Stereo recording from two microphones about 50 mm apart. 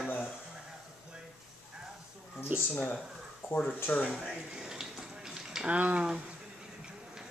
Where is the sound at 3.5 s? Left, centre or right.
Left.